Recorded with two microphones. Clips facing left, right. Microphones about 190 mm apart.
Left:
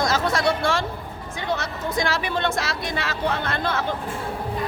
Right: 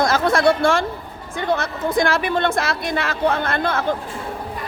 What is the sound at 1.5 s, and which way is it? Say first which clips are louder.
Speech: right 6 dB; 50° right (ahead or behind).